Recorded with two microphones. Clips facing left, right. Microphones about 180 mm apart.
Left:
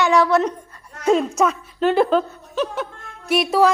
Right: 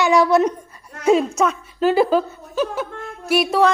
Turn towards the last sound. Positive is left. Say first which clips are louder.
# even
turn(degrees=0)  # may be behind; listen again after turning